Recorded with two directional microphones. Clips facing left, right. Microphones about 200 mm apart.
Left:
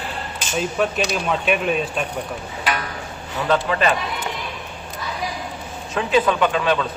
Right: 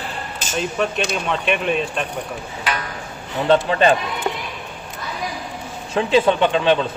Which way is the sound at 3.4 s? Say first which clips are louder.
Right 4 dB; 30° right (ahead or behind).